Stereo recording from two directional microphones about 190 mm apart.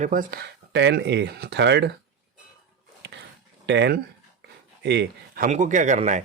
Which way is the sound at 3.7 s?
65° right (ahead or behind).